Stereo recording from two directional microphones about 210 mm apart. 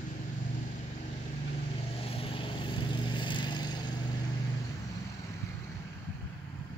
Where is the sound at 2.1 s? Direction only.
25° left (ahead or behind).